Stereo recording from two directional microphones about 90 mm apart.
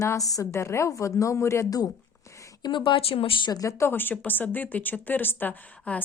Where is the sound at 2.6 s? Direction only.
65° left (ahead or behind).